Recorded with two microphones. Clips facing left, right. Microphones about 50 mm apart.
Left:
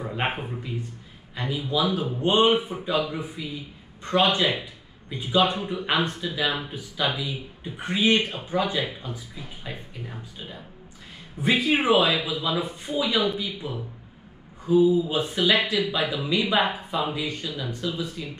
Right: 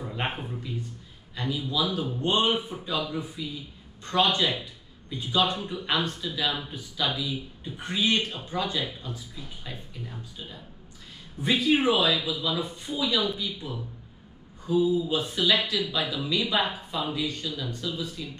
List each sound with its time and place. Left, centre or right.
0.0 s speech: left